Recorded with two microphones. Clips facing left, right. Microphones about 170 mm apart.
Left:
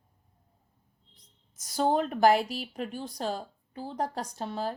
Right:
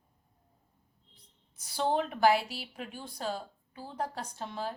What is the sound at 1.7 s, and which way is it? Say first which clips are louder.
Speech: left 4 dB; 45° left (ahead or behind).